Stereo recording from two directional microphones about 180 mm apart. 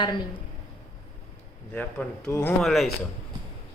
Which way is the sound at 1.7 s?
5° left (ahead or behind).